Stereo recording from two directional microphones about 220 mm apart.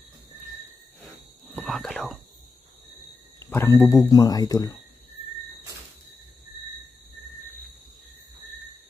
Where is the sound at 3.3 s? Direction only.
10° left (ahead or behind).